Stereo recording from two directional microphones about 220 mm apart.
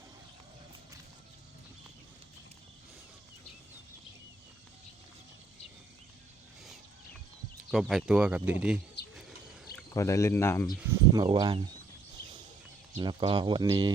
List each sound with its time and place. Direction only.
7.7 s speech: centre (ahead or behind)
9.0 s bird: 50° left (ahead or behind)
9.9 s speech: 15° left (ahead or behind)
10.8 s speech: 15° right (ahead or behind)
12.9 s speech: 20° right (ahead or behind)